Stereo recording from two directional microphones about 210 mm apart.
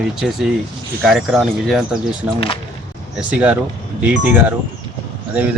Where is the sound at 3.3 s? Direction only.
5° right (ahead or behind).